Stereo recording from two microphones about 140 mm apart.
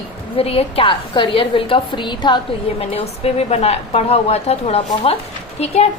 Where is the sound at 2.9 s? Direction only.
45° left (ahead or behind).